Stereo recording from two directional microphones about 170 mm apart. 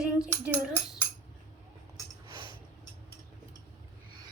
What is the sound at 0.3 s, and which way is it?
Dishes, 15° right (ahead or behind).